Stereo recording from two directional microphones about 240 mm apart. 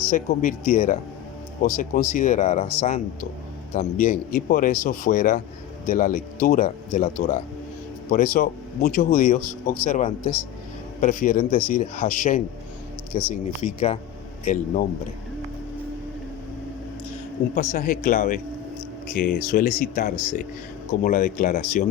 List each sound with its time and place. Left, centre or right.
0.1 s speech: left
17.5 s speech: left